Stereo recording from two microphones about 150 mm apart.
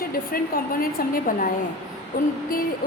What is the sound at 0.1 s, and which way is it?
A woman's voice, 75° left (ahead or behind).